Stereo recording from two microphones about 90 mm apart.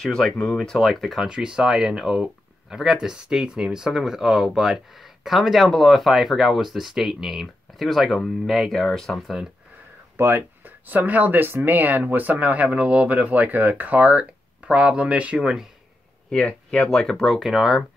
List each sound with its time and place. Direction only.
0.0 s speech: 10° left (ahead or behind)
10.1 s speech: 30° right (ahead or behind); by 15.7 s 5° right (ahead or behind)
16.3 s speech: 10° left (ahead or behind)